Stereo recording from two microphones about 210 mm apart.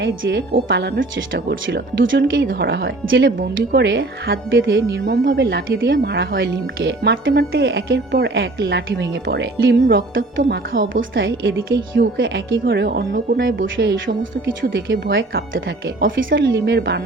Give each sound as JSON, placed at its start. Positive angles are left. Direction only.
{"t": 0.0, "sound": "speech", "side_deg": -55}
{"t": 11.1, "sound": "speech", "side_deg": -60}
{"t": 12.6, "sound": "speech", "side_deg": -50}
{"t": 15.1, "sound": "speech", "side_deg": -45}
{"t": 16.1, "sound": "speech", "side_deg": -60}